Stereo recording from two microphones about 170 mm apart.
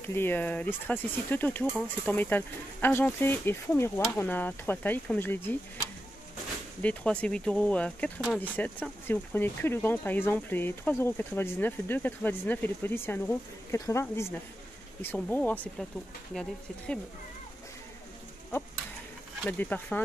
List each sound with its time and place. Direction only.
0.0 s speech: 15° left (ahead or behind)
6.8 s speech: 10° left (ahead or behind)
19.4 s speech: 10° left (ahead or behind)